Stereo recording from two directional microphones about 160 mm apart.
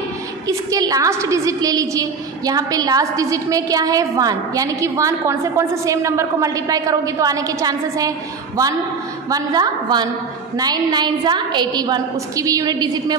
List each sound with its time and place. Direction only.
0.5 s a woman's voice: 20° right (ahead or behind)
9.3 s a woman's voice: 25° right (ahead or behind)